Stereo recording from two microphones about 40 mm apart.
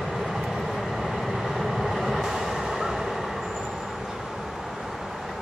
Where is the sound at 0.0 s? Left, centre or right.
Centre.